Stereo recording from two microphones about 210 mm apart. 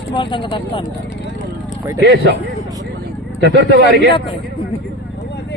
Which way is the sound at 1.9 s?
55° right (ahead or behind).